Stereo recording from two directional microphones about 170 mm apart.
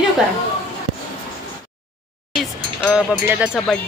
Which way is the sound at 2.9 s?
5° right (ahead or behind).